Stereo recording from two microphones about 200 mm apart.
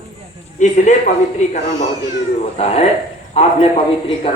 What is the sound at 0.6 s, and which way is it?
Speech, 35° left (ahead or behind).